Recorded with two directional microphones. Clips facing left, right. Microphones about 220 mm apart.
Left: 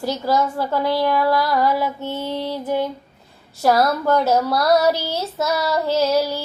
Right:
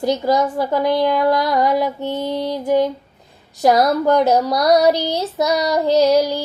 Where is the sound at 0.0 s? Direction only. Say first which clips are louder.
Right 3 dB; 15° right (ahead or behind).